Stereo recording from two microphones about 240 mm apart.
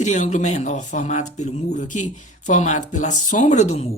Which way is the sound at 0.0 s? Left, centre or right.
Left.